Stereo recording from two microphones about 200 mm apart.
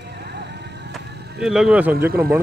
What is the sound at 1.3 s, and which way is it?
Speech, centre (ahead or behind).